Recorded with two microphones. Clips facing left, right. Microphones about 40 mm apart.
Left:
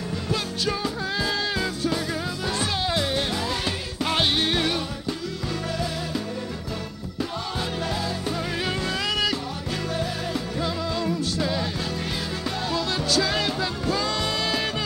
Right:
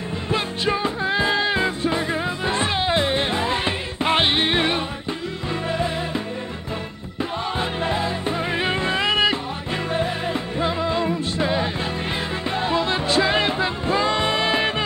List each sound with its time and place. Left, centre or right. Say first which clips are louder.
0.3 s music: right 5 dB; right
7.5 s music: right 5 dB; right